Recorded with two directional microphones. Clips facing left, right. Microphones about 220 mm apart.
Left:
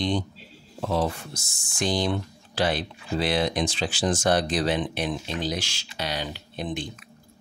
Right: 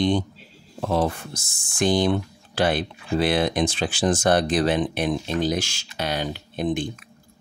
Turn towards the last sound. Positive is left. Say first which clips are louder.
# right 7 dB
turn(degrees=-50)  # may be behind; listen again after turning